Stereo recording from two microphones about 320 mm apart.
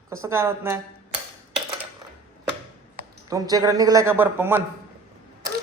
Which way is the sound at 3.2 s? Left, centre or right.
Centre.